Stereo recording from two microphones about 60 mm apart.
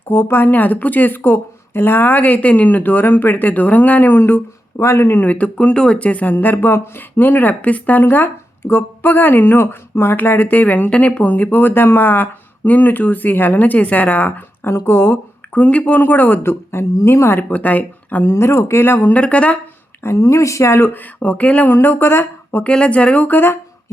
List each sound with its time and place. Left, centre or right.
0.1 s speech: left
4.8 s speech: left
6.3 s speech: left
8.0 s speech: left
14.8 s speech: left
17.5 s speech: left
18.3 s speech: left
20.0 s a woman's voice: left
20.2 s speech: left
21.7 s speech: left
22.6 s speech: left